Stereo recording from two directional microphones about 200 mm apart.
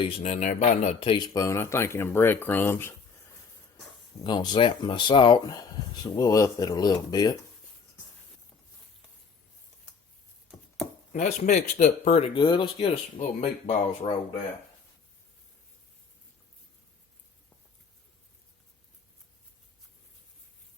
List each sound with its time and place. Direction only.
0.0 s speech: 35° left (ahead or behind); by 2.9 s 10° left (ahead or behind)
4.2 s speech: 20° left (ahead or behind)
11.1 s speech: 40° left (ahead or behind)
12.3 s speech: 25° left (ahead or behind)